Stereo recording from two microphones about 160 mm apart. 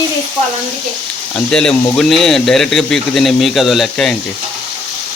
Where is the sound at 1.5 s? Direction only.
5° left (ahead or behind).